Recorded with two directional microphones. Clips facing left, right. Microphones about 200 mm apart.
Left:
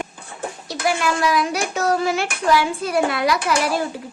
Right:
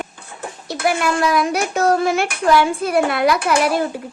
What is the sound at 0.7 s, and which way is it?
A child's voice, 55° right (ahead or behind).